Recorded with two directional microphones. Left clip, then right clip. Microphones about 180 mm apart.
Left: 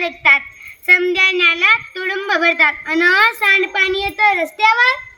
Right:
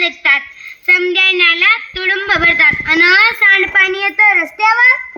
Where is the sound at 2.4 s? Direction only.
55° left (ahead or behind).